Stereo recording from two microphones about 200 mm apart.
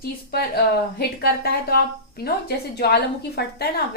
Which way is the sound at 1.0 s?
50° left (ahead or behind).